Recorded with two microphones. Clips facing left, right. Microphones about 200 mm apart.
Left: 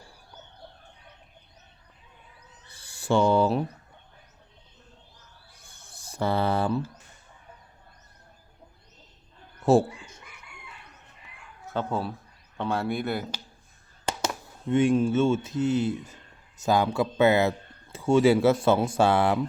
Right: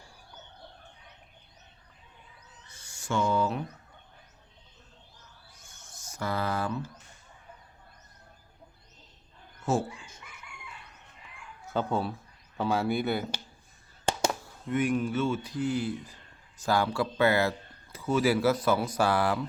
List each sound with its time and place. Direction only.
2.6 s owl: 35° left (ahead or behind)
5.5 s a sound: 35° left (ahead or behind)
9.7 s speech: 35° left (ahead or behind)
11.6 s speech: centre (ahead or behind)
14.7 s speech: 25° left (ahead or behind)